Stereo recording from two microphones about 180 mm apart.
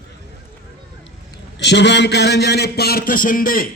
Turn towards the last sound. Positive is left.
turn(degrees=50)  # may be behind; listen again after turning